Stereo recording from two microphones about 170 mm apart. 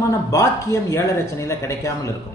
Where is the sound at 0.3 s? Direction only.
15° left (ahead or behind).